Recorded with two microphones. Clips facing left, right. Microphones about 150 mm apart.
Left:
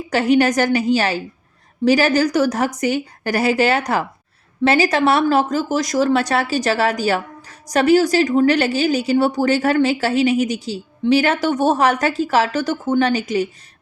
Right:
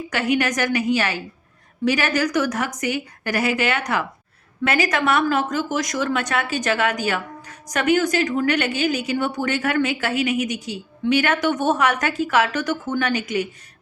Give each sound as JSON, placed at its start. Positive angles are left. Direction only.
{"t": 0.1, "sound": "speech", "side_deg": 30}